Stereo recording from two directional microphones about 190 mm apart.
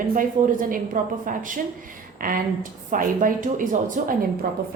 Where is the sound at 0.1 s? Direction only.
45° right (ahead or behind).